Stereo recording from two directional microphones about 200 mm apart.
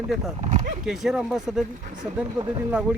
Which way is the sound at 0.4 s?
35° right (ahead or behind).